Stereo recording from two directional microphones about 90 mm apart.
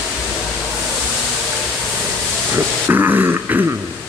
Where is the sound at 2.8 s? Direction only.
25° right (ahead or behind).